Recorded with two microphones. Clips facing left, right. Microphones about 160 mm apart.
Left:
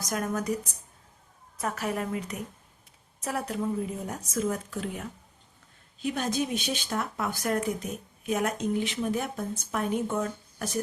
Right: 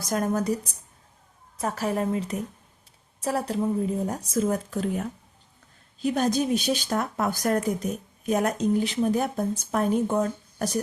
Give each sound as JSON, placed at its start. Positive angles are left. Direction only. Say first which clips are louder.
{"t": 0.0, "sound": "speech", "louder": "right 5 dB", "side_deg": -30}